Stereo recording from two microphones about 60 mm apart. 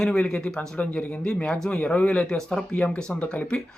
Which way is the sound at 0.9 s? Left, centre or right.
Left.